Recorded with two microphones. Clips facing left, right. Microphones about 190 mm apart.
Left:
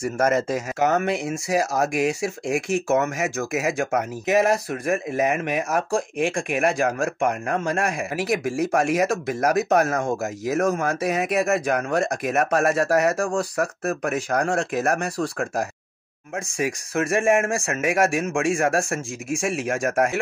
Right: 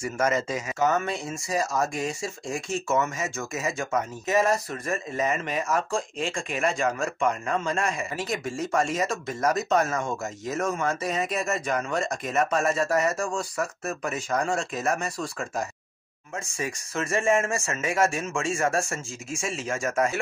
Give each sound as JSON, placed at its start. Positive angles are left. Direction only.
{"t": 0.0, "sound": "speech", "side_deg": 60}